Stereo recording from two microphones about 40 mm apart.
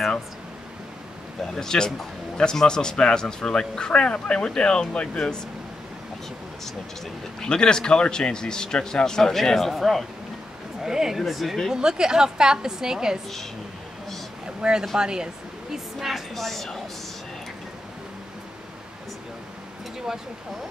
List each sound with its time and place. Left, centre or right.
1.5 s a man's voice: centre
7.4 s a man's voice: centre
10.8 s speech: centre
11.1 s a woman's voice: centre
11.7 s a woman's voice: centre
14.4 s a sound: centre
15.0 s speech: centre
15.7 s a woman's voice: centre